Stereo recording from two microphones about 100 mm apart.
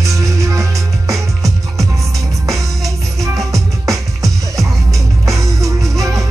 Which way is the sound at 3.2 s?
35° right (ahead or behind).